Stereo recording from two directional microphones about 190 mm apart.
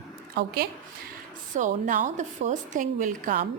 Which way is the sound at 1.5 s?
45° right (ahead or behind).